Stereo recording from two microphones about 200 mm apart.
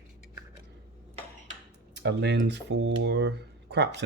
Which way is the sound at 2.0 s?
60° right (ahead or behind).